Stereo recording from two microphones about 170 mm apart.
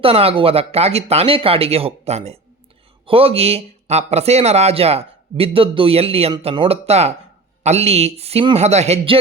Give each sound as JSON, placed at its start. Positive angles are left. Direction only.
{"t": 0.0, "sound": "speech", "side_deg": -35}